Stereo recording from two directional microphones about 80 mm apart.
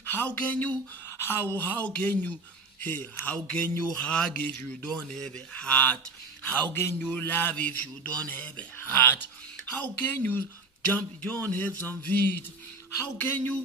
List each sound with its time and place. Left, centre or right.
0.0 s speech: left
3.3 s speech: centre
6.7 s a man's voice: left
7.0 s speech: left